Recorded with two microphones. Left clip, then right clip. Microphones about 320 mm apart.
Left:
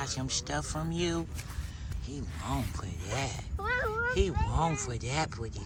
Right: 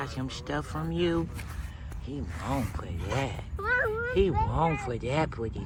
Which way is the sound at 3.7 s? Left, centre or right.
Right.